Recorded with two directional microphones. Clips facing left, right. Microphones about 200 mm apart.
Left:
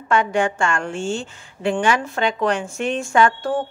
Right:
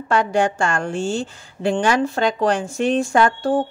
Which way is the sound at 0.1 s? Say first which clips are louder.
Right 1 dB; 35° right (ahead or behind).